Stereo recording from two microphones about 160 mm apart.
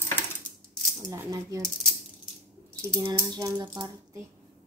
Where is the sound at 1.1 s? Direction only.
20° right (ahead or behind).